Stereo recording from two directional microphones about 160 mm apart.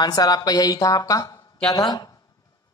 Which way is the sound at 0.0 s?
25° left (ahead or behind).